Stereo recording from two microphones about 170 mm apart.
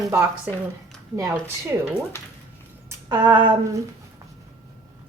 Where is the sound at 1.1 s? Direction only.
15° right (ahead or behind).